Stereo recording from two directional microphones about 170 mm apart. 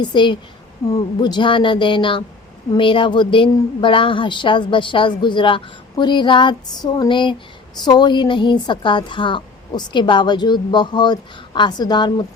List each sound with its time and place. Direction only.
0.0 s a woman's voice: 25° left (ahead or behind)